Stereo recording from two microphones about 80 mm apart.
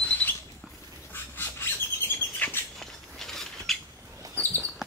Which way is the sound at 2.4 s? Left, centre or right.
Left.